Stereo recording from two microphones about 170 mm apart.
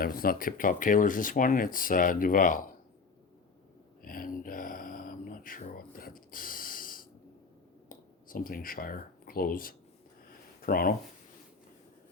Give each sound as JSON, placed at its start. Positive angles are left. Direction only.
{"t": 0.0, "sound": "speech", "side_deg": 60}
{"t": 4.0, "sound": "a sound", "side_deg": 55}
{"t": 7.9, "sound": "speech", "side_deg": 55}